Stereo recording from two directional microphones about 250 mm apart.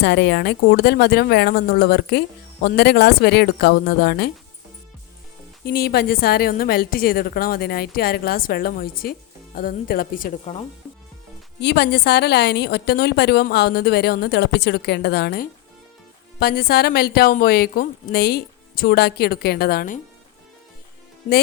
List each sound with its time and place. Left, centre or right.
0.0 s speech: left
5.6 s speech: left
11.6 s speech: left